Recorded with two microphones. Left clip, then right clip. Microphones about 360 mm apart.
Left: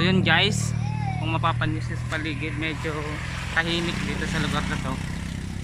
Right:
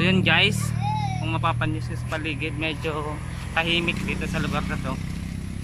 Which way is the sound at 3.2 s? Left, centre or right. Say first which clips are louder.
Left 6 dB; left.